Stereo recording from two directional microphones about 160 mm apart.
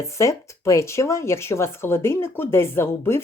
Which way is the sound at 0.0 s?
20° left (ahead or behind).